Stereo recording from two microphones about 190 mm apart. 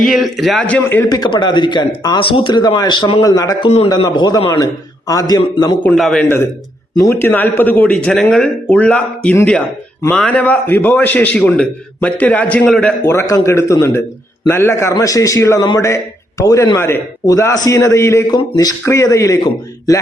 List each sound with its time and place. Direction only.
0.0 s a man's voice: centre (ahead or behind)
1.2 s a man's voice: 25° left (ahead or behind)
5.8 s a man's voice: 5° left (ahead or behind)
13.1 s a man's voice: 15° left (ahead or behind)